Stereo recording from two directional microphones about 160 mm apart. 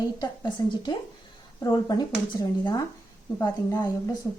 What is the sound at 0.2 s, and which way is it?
A woman's voice, 30° left (ahead or behind).